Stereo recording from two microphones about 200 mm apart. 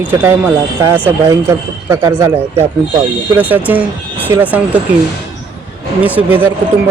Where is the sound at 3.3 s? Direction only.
10° right (ahead or behind).